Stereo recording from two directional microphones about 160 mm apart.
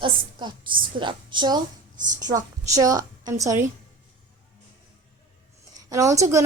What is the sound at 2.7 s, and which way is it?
Speech, 20° right (ahead or behind).